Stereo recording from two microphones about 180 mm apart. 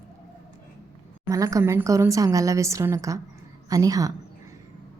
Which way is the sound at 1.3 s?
20° right (ahead or behind).